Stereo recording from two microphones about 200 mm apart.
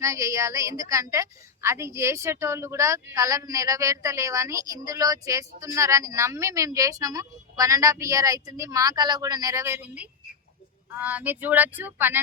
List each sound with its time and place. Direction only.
0.0 s a woman's voice: 15° right (ahead or behind)